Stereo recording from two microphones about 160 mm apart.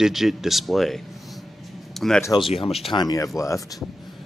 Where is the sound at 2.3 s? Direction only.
35° left (ahead or behind).